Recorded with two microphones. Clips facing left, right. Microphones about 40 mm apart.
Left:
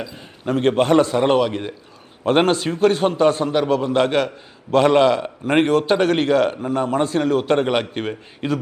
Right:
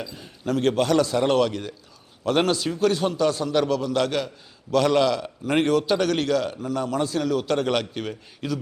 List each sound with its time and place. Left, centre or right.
0.0 s a man's voice: left